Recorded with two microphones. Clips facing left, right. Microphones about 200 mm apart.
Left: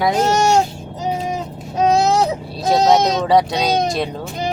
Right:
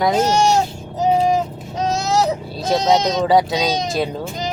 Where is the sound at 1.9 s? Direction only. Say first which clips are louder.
Left 2 dB; 55° left (ahead or behind).